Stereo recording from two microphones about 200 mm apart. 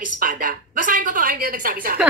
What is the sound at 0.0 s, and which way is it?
A woman's voice, 45° right (ahead or behind).